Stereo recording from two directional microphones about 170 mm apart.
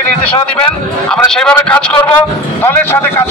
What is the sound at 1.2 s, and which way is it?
Speech, 5° left (ahead or behind).